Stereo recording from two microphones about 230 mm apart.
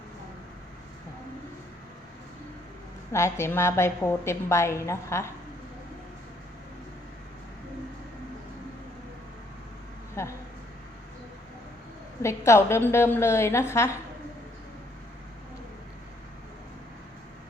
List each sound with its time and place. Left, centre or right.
3.1 s a woman's voice: centre
10.2 s a sound: centre
12.5 s a woman's voice: centre